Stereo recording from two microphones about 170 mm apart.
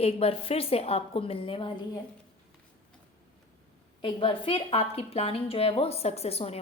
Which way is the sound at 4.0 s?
30° left (ahead or behind).